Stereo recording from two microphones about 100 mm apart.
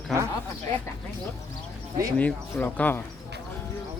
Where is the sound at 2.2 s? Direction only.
15° left (ahead or behind).